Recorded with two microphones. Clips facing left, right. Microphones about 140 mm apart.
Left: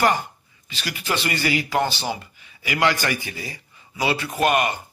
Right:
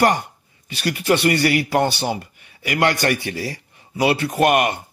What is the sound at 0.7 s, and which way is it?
A man's voice, 55° right (ahead or behind).